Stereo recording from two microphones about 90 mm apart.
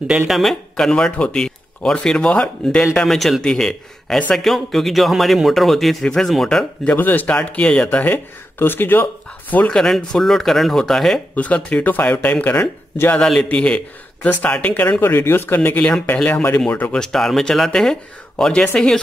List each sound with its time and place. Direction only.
0.3 s speech: centre (ahead or behind); by 9.8 s 20° left (ahead or behind)
9.8 s speech: 5° left (ahead or behind)
11.3 s speech: 15° left (ahead or behind)
13.1 s speech: 5° left (ahead or behind)
17.0 s speech: 5° left (ahead or behind)